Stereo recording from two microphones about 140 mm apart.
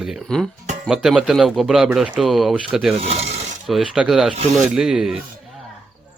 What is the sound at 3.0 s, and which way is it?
Filing, 50° right (ahead or behind).